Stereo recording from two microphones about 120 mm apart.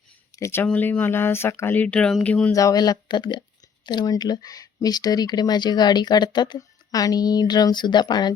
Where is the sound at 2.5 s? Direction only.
30° left (ahead or behind).